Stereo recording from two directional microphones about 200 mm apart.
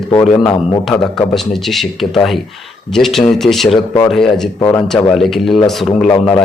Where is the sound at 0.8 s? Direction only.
5° left (ahead or behind).